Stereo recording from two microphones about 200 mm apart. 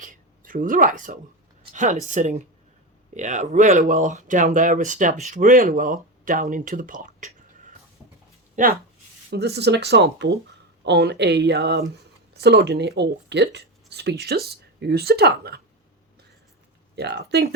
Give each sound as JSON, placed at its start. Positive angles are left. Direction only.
{"t": 0.0, "sound": "a sound", "side_deg": -40}
{"t": 1.7, "sound": "speech", "side_deg": -40}
{"t": 8.6, "sound": "speech", "side_deg": -40}
{"t": 9.3, "sound": "speech", "side_deg": -55}
{"t": 16.9, "sound": "speech", "side_deg": -55}